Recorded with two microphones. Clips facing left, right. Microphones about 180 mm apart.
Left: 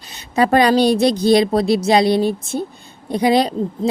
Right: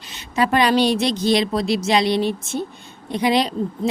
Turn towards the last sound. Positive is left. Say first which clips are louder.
# left 3 dB
turn(degrees=35)  # may be behind; listen again after turning